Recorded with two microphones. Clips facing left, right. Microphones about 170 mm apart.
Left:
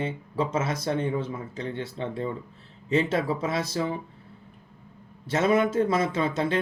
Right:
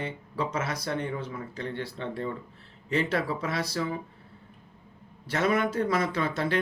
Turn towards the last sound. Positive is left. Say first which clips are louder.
# left 2 dB
turn(degrees=25)  # may be behind; listen again after turning